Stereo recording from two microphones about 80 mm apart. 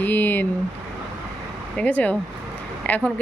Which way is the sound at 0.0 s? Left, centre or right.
Left.